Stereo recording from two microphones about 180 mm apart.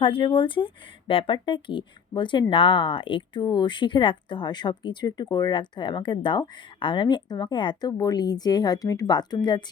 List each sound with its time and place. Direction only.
0.0 s speech: 30° left (ahead or behind)